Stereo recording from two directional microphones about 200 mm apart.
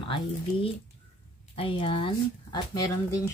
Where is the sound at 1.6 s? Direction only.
25° left (ahead or behind).